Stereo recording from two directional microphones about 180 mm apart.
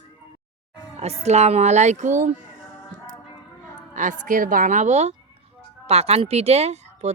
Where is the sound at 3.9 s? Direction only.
45° right (ahead or behind).